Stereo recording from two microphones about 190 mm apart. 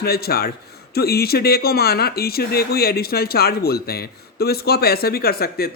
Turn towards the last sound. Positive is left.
turn(degrees=55)  # may be behind; listen again after turning